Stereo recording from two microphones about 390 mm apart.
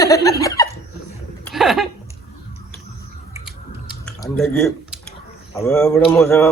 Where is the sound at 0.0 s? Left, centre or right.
Centre.